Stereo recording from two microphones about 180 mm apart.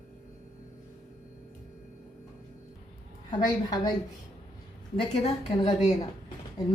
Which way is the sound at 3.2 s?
25° left (ahead or behind).